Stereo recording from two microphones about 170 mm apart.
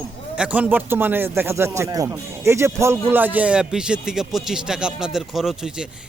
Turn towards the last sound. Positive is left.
turn(degrees=-5)  # may be behind; listen again after turning